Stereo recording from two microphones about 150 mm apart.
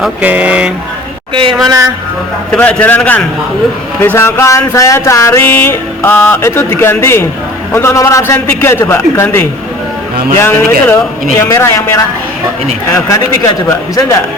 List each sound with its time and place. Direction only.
0.0 s speech: 10° right (ahead or behind)
1.3 s speech: 35° right (ahead or behind)
1.6 s speech: 25° right (ahead or behind)
2.5 s a sound: 10° left (ahead or behind)
7.7 s a man's voice: 15° left (ahead or behind)
8.3 s a sound: 15° left (ahead or behind)
12.9 s a man's voice: 20° left (ahead or behind)